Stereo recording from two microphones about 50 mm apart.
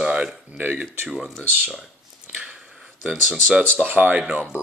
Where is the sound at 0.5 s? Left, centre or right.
Right.